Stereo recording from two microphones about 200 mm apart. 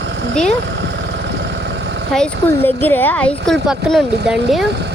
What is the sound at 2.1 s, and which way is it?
A woman's voice, 10° left (ahead or behind).